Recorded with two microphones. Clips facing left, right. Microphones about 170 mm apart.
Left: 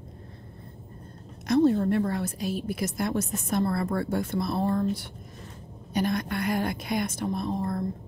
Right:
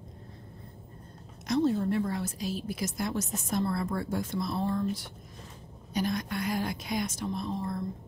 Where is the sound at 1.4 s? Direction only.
60° left (ahead or behind).